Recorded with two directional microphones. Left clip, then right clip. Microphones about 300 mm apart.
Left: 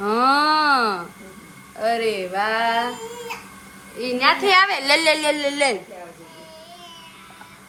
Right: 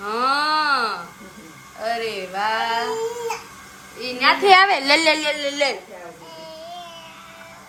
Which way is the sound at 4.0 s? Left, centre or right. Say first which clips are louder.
Left 3 dB; left.